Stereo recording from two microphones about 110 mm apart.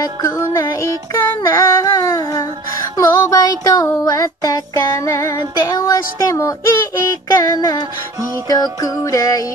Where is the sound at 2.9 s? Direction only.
35° left (ahead or behind).